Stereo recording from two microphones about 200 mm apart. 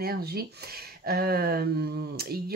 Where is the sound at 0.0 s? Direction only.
50° right (ahead or behind).